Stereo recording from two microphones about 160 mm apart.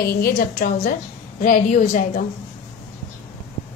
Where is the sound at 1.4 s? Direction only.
50° left (ahead or behind).